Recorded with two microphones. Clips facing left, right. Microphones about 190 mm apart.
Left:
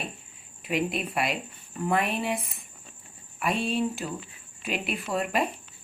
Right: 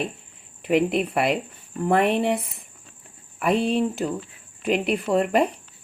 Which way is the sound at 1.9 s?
65° right (ahead or behind).